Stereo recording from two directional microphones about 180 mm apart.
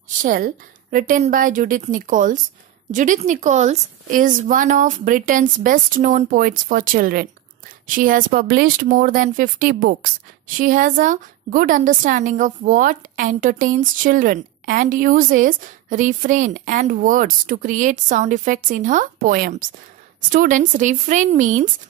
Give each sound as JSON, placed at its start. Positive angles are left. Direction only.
{"t": 0.2, "sound": "a woman's voice", "side_deg": -50}